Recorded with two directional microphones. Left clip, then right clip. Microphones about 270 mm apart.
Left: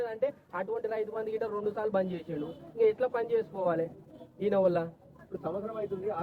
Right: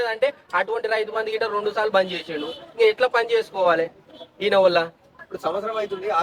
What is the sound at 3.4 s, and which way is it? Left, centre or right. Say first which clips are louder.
A man's voice: right 10 dB; centre.